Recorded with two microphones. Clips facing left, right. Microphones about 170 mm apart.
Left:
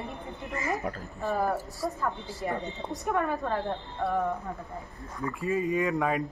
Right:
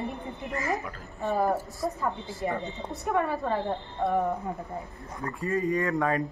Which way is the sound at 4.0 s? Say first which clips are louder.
Right 2 dB; 15° right (ahead or behind).